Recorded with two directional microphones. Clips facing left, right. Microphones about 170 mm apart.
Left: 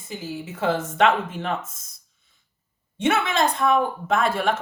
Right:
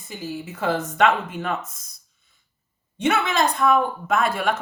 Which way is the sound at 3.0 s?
25° left (ahead or behind).